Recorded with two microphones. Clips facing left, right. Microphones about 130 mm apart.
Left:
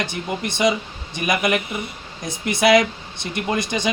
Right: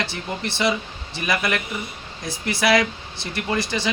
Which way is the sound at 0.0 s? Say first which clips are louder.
Left 2 dB; 15° left (ahead or behind).